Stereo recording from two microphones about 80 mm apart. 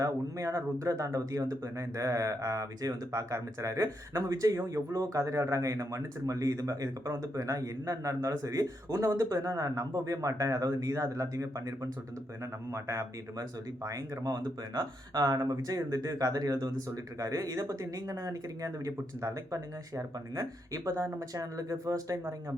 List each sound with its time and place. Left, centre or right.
0.0 s speech: right
13.3 s speech: right